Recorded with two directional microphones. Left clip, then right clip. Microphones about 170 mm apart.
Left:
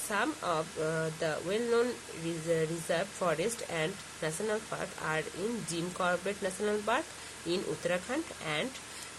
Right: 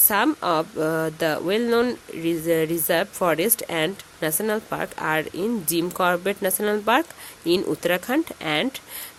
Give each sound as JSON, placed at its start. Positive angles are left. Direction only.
{"t": 0.1, "sound": "speech", "side_deg": -65}